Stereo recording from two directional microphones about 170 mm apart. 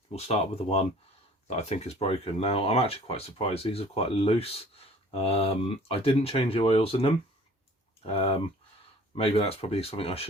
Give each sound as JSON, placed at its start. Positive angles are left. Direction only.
{"t": 0.1, "sound": "speech", "side_deg": 40}